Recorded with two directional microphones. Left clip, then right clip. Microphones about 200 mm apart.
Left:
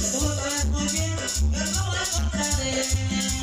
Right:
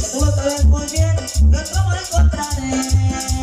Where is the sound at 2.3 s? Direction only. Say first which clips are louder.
Right 4 dB; 50° right (ahead or behind).